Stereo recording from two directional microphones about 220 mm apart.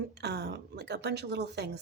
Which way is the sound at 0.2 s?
50° right (ahead or behind).